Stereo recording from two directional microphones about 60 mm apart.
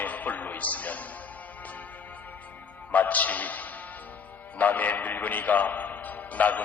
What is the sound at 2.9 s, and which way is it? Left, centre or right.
A man's voice, left.